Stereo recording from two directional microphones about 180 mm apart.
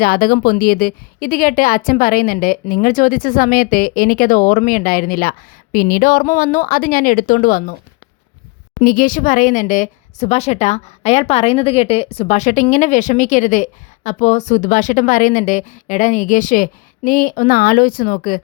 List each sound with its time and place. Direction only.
0.0 s a woman's voice: 55° left (ahead or behind)
8.8 s a woman's voice: 50° left (ahead or behind)